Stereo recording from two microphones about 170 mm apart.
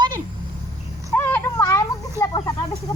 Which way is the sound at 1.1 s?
10° left (ahead or behind).